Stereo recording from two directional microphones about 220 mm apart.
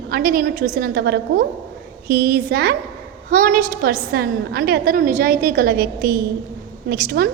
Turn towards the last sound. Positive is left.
turn(degrees=-45)  # may be behind; listen again after turning